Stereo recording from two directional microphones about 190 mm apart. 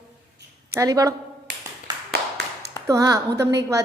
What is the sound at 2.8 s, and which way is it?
Speech, 15° right (ahead or behind).